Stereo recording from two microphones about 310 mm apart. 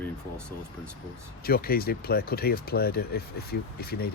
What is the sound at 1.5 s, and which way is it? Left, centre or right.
Speech, left.